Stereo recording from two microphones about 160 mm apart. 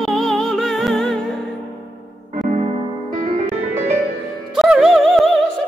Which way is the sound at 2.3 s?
45° right (ahead or behind).